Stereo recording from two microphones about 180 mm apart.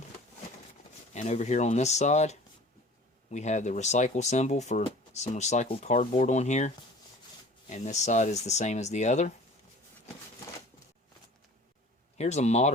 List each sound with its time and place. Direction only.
1.1 s speech: 40° left (ahead or behind)
7.7 s speech: 40° left (ahead or behind)
12.1 s speech: 40° left (ahead or behind)